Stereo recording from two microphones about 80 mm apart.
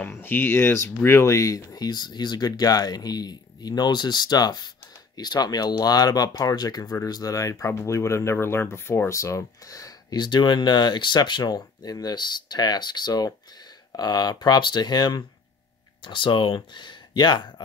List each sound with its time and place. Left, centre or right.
0.0 s speech: left
10.1 s speech: left
16.0 s speech: left